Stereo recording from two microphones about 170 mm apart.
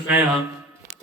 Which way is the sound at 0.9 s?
45° right (ahead or behind).